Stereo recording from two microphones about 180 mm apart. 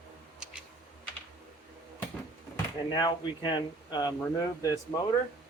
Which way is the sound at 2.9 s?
25° left (ahead or behind).